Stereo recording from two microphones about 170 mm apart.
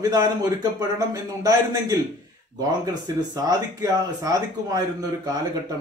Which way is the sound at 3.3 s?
20° right (ahead or behind).